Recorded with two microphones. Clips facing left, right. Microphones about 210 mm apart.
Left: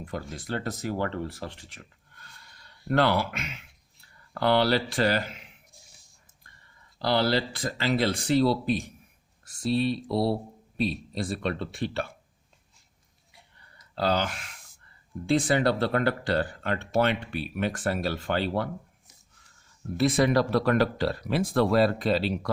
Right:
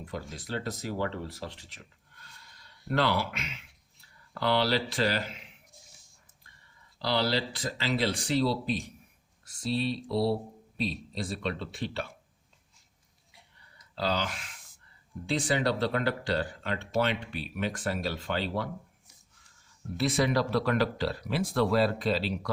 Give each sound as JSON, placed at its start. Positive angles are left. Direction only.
{"t": 0.0, "sound": "speech", "side_deg": 55}
{"t": 2.9, "sound": "speech", "side_deg": 50}
{"t": 7.0, "sound": "speech", "side_deg": 50}
{"t": 13.9, "sound": "speech", "side_deg": 50}
{"t": 20.0, "sound": "speech", "side_deg": 50}